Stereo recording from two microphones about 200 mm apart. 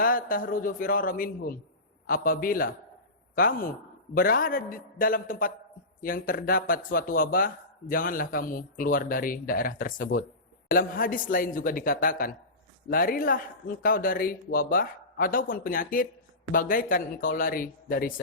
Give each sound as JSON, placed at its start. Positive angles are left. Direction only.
{"t": 0.0, "sound": "a man's voice", "side_deg": 45}